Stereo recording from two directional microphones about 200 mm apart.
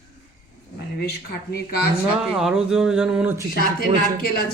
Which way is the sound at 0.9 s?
55° left (ahead or behind).